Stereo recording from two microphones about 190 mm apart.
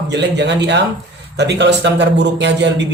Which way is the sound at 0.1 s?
65° right (ahead or behind).